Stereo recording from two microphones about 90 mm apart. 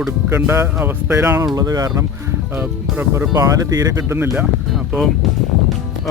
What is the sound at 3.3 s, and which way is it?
Speech, 40° right (ahead or behind).